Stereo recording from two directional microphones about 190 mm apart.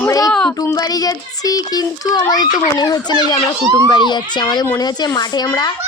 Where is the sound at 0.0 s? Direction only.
15° left (ahead or behind).